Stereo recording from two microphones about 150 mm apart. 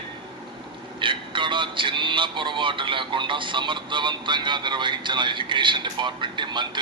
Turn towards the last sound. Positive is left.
turn(degrees=-30)  # may be behind; listen again after turning